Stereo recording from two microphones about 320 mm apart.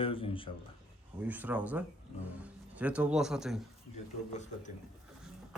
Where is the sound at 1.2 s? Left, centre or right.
Centre.